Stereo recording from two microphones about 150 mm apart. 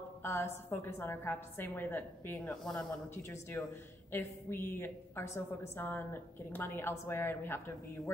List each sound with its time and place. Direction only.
0.2 s a woman's voice: 15° left (ahead or behind)
3.2 s a woman's voice: 15° left (ahead or behind)